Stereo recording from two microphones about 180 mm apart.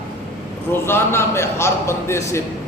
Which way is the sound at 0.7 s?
15° left (ahead or behind).